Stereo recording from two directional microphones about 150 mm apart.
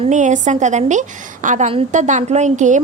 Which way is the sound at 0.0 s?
55° right (ahead or behind).